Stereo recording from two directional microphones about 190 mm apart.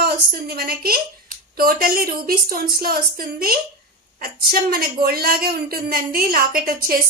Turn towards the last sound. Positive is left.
turn(degrees=-50)  # may be behind; listen again after turning